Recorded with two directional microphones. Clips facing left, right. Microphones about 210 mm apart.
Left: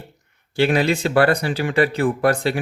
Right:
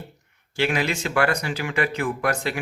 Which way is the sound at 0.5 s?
35° left (ahead or behind).